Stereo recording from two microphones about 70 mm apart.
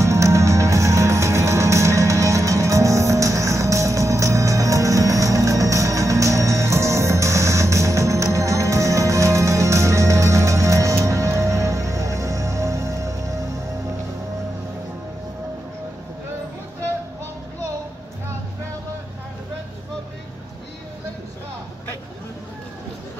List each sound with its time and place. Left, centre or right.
0.0 s music: right